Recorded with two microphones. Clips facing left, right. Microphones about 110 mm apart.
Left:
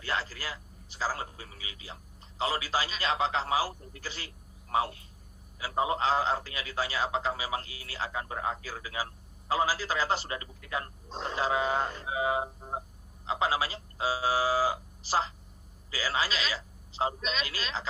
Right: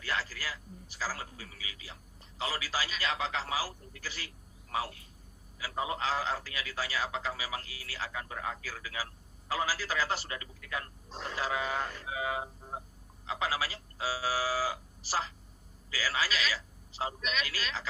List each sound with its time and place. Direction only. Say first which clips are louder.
0.0 s a man's voice: left 2 dB; 25° left (ahead or behind)